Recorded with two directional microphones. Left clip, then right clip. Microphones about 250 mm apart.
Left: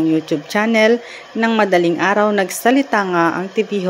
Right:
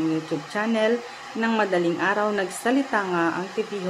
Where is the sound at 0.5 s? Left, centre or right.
Left.